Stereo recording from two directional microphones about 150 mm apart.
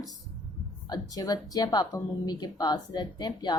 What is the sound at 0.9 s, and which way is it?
A woman's voice, 25° left (ahead or behind).